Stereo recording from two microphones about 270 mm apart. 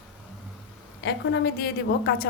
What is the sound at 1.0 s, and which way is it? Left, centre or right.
A woman's voice, left.